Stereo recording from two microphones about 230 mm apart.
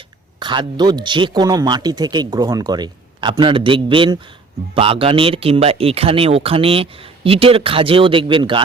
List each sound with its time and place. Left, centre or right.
0.3 s speech: centre